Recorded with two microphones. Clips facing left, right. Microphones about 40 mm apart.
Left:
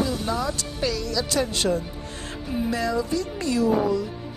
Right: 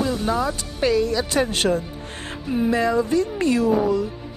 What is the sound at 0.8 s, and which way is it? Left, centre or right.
Speech, right.